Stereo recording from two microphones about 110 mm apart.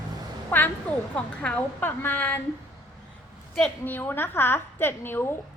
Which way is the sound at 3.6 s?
15° left (ahead or behind).